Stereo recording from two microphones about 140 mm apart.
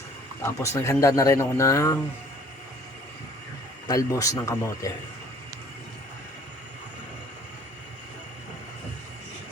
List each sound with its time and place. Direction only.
0.6 s speech: 20° left (ahead or behind)
3.8 s speech: 25° left (ahead or behind)